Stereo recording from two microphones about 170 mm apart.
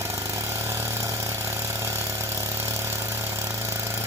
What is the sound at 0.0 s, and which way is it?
Vehicle, 15° right (ahead or behind).